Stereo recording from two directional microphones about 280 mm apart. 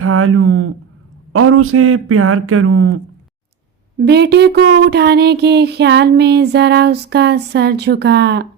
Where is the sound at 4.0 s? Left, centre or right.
Right.